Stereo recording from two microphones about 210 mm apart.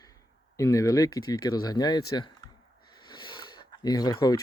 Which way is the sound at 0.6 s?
15° left (ahead or behind).